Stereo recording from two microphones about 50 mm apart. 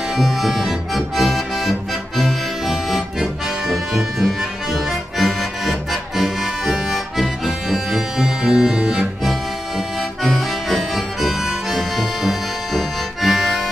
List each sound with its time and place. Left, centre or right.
0.1 s accordion: centre
10.2 s music: centre